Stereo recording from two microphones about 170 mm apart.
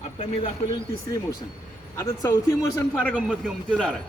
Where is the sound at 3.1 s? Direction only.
5° right (ahead or behind).